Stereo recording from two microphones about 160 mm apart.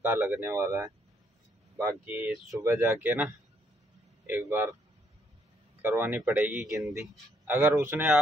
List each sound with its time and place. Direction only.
0.0 s speech: 15° right (ahead or behind)
5.8 s speech: 10° right (ahead or behind)